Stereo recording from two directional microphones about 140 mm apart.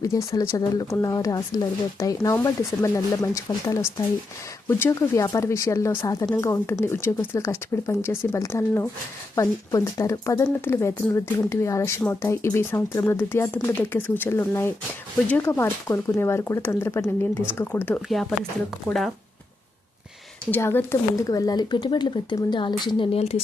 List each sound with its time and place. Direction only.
0.0 s speech: 20° left (ahead or behind)
18.1 s speech: centre (ahead or behind)
20.5 s speech: 15° left (ahead or behind); by 23.0 s 35° left (ahead or behind)
23.1 s a woman's voice: 50° left (ahead or behind)